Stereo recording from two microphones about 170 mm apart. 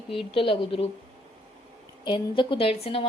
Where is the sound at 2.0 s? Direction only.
30° left (ahead or behind).